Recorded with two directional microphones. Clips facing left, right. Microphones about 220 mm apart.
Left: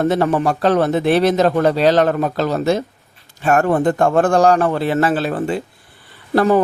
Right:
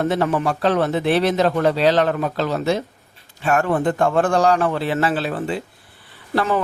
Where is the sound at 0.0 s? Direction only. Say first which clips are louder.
Left 3 dB; 40° left (ahead or behind).